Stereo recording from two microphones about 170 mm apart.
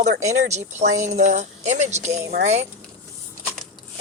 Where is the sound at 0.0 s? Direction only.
40° right (ahead or behind).